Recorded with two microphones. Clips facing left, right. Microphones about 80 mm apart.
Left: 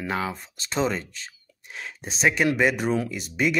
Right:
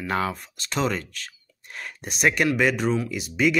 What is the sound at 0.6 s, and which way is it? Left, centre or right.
Speech, left.